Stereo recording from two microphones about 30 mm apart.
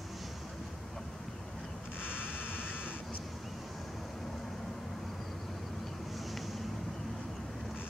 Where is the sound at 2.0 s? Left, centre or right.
Left.